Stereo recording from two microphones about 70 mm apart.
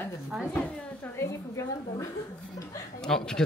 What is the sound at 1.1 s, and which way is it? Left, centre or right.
Speech, left.